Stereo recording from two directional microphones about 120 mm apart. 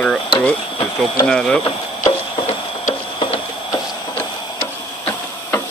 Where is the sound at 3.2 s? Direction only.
45° left (ahead or behind).